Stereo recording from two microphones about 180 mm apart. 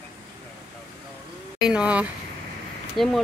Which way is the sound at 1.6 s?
5° right (ahead or behind).